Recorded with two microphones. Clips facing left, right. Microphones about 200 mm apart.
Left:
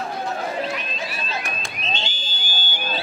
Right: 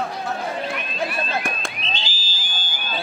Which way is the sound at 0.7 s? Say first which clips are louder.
Right 4 dB; 55° right (ahead or behind).